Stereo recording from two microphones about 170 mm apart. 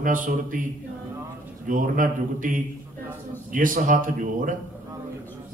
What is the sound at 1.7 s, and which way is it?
Speech, 50° right (ahead or behind).